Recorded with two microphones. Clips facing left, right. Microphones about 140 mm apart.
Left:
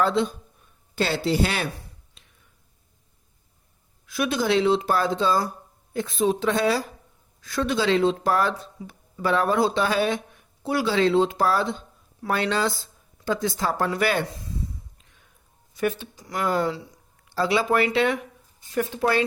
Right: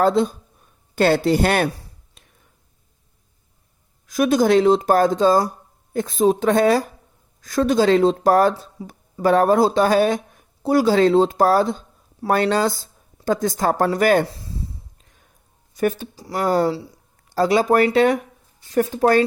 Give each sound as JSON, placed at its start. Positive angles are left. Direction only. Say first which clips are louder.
{"t": 0.0, "sound": "speech", "louder": "right 5 dB", "side_deg": -40}
{"t": 0.9, "sound": "speech", "louder": "right 7 dB", "side_deg": -50}
{"t": 4.0, "sound": "speech", "louder": "right 8 dB", "side_deg": -40}
{"t": 12.3, "sound": "a sound", "louder": "right 6 dB", "side_deg": -45}
{"t": 15.7, "sound": "speech", "louder": "right 5 dB", "side_deg": -40}